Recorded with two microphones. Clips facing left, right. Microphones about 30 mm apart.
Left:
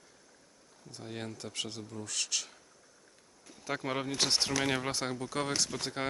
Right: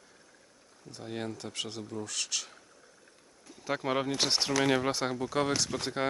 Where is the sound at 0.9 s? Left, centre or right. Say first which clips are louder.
Right 4 dB; centre.